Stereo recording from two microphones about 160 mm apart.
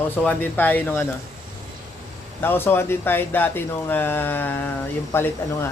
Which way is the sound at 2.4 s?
15° left (ahead or behind).